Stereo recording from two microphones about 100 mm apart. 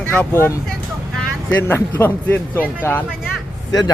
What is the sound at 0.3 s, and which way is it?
A man's voice, 25° left (ahead or behind).